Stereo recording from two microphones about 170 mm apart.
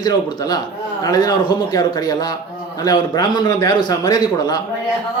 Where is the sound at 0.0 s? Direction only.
25° left (ahead or behind).